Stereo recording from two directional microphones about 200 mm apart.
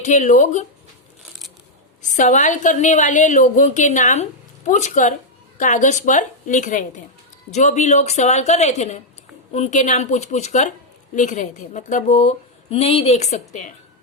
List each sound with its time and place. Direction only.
0.0 s a woman's voice: 35° left (ahead or behind)
2.0 s a woman's voice: 40° left (ahead or behind)